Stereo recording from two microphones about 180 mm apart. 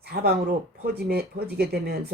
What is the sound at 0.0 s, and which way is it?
Speech, 60° right (ahead or behind).